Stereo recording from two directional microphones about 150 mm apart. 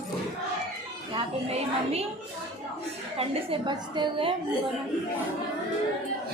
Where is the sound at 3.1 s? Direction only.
35° right (ahead or behind).